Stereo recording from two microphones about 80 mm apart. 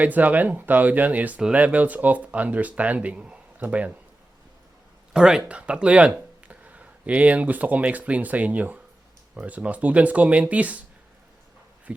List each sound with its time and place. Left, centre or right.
0.0 s speech: right
5.1 s speech: centre
11.9 s insect: centre